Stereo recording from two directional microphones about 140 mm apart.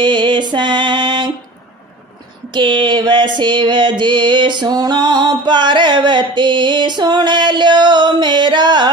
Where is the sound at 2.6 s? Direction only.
35° right (ahead or behind).